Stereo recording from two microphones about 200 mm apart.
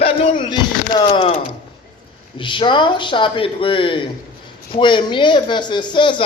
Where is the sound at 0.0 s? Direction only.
25° left (ahead or behind).